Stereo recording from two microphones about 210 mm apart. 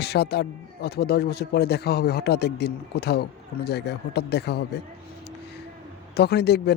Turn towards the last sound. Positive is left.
turn(degrees=50)  # may be behind; listen again after turning